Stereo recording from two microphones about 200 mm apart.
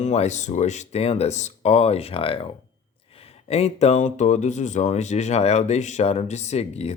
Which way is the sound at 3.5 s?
30° left (ahead or behind).